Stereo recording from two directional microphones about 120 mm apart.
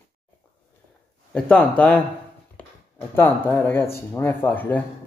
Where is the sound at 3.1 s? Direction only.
20° left (ahead or behind).